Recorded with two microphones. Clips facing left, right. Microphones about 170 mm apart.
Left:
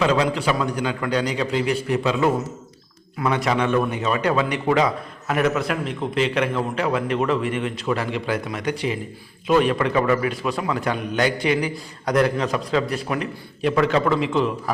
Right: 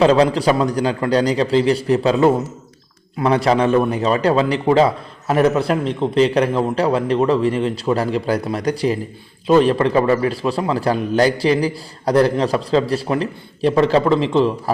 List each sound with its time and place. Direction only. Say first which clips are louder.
0.0 s a man's voice: right 7 dB; 35° right (ahead or behind)